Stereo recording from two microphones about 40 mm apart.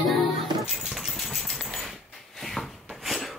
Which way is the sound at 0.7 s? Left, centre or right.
Centre.